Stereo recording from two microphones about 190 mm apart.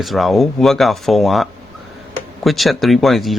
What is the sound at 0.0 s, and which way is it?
Speech, centre (ahead or behind).